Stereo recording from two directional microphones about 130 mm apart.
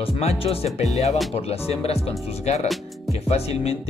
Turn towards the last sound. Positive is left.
turn(degrees=50)  # may be behind; listen again after turning